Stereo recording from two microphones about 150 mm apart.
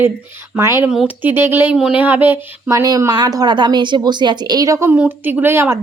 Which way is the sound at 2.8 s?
25° right (ahead or behind).